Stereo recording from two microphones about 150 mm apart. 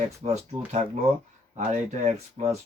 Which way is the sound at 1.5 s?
50° right (ahead or behind).